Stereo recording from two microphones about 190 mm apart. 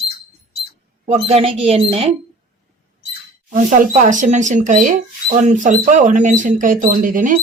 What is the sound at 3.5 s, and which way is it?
Speech, 45° right (ahead or behind).